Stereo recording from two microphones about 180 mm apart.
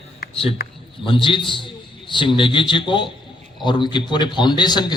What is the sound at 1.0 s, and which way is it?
A man's voice, 30° left (ahead or behind).